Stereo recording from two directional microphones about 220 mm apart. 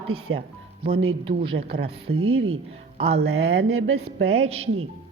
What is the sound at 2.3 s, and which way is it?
Speech, 70° right (ahead or behind).